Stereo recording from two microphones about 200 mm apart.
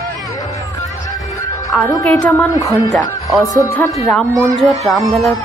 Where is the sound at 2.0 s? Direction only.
10° left (ahead or behind).